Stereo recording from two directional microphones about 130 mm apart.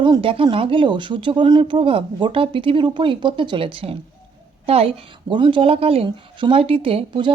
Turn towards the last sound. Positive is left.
turn(degrees=-40)  # may be behind; listen again after turning